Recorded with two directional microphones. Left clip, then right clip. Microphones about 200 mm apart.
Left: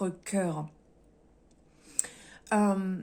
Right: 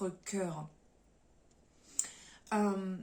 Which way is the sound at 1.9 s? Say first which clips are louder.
Left 4 dB; 50° left (ahead or behind).